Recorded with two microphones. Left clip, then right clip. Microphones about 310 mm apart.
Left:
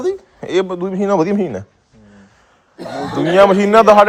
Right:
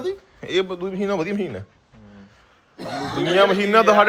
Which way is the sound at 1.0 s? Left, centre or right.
Centre.